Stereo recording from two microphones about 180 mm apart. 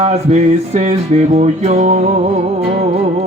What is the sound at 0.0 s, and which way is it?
Mantra, 35° right (ahead or behind).